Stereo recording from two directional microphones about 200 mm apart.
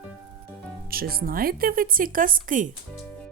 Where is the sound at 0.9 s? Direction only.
50° right (ahead or behind).